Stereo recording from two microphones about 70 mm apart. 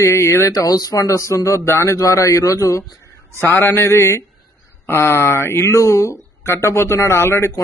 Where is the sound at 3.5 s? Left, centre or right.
Left.